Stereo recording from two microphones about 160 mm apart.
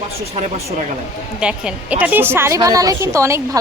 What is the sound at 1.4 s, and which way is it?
A woman's voice, 5° right (ahead or behind).